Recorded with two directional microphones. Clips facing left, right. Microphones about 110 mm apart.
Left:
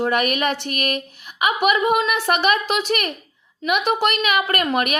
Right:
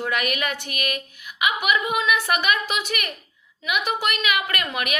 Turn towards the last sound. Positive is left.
turn(degrees=40)  # may be behind; listen again after turning